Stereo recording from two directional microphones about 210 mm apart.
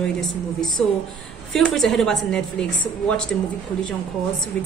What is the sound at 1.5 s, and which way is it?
A woman's voice, centre (ahead or behind).